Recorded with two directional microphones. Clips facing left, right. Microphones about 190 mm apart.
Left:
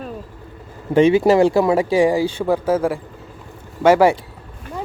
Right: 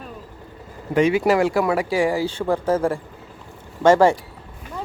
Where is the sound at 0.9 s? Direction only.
25° left (ahead or behind); by 4.1 s 10° left (ahead or behind).